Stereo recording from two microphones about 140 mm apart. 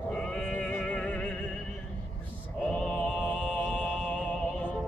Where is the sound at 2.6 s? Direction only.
5° left (ahead or behind).